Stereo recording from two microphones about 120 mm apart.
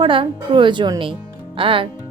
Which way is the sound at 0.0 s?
45° right (ahead or behind).